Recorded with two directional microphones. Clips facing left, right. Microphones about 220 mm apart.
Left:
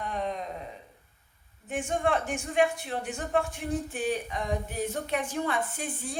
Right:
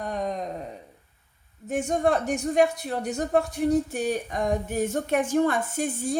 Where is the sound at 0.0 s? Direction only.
40° right (ahead or behind).